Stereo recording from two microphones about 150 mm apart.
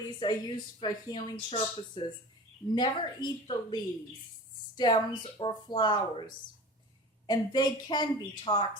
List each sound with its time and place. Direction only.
0.2 s speech: 30° left (ahead or behind)
7.3 s speech: 30° left (ahead or behind)